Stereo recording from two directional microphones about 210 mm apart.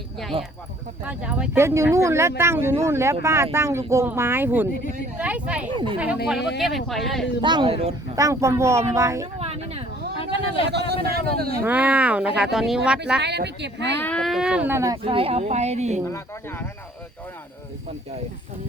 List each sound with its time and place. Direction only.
0.3 s speech: 25° right (ahead or behind)
1.0 s speech: 5° right (ahead or behind)
5.7 s speech: 25° right (ahead or behind)
6.6 s speech: centre (ahead or behind)
7.4 s speech: 20° right (ahead or behind)
8.1 s speech: 15° right (ahead or behind)
9.4 s a sound: 30° right (ahead or behind)
10.2 s a sound: 25° left (ahead or behind)
10.7 s speech: 50° right (ahead or behind)
11.6 s speech: 5° right (ahead or behind)
13.2 s speech: 55° right (ahead or behind)
14.0 s speech: 5° left (ahead or behind); by 16.0 s 35° right (ahead or behind)
16.0 s speech: 10° left (ahead or behind)